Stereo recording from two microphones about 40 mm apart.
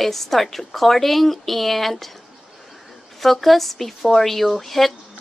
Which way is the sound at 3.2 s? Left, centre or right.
Centre.